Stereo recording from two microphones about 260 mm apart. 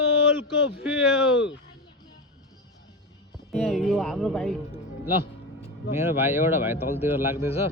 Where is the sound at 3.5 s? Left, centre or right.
Centre.